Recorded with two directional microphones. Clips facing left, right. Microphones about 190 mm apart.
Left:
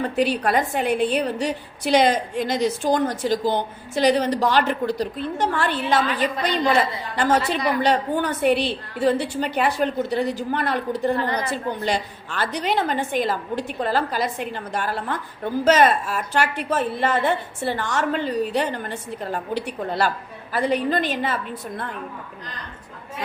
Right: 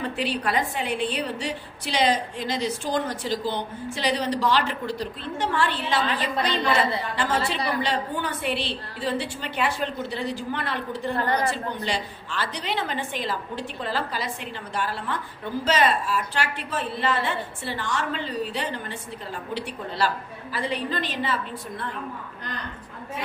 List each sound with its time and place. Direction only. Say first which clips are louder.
0.0 s a woman's voice: left 6 dB; 45° left (ahead or behind)
7.2 s a woman's voice: left 8 dB; 45° left (ahead or behind)
11.2 s a woman's voice: right 1 dB; 45° right (ahead or behind)
11.5 s a woman's voice: left 5 dB; 50° left (ahead or behind)